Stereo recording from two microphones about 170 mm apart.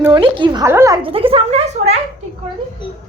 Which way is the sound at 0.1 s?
30° right (ahead or behind).